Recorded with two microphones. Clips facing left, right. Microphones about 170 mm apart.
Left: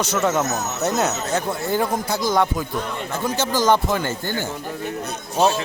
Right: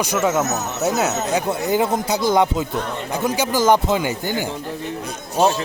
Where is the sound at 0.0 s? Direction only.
10° right (ahead or behind).